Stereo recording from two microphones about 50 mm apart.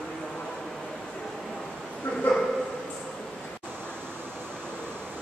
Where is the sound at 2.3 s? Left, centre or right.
Centre.